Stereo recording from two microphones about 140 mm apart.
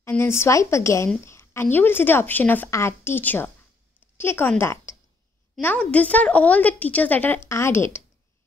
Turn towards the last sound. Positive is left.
turn(degrees=15)  # may be behind; listen again after turning